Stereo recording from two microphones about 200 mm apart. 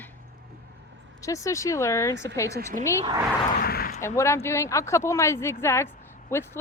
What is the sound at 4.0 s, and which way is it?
Speech, 15° left (ahead or behind).